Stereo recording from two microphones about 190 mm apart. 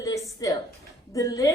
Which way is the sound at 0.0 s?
15° left (ahead or behind).